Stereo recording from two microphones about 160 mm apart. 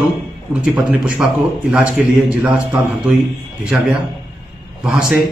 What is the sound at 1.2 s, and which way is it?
A man's voice, 5° right (ahead or behind).